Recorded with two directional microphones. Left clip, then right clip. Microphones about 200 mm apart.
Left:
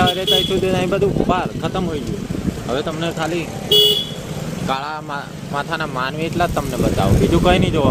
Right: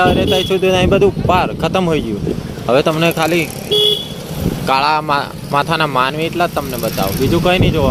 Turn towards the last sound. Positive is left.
turn(degrees=-5)  # may be behind; listen again after turning